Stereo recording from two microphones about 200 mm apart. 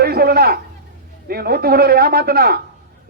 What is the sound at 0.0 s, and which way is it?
A man's voice, 50° right (ahead or behind).